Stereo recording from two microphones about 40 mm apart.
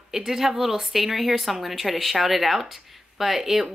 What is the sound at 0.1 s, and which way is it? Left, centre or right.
A woman's voice, centre.